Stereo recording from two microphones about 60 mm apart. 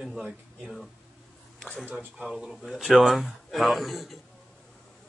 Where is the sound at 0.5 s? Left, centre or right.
Centre.